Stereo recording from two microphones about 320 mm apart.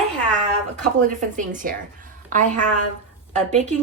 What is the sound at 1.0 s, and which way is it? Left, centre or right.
Speech, right.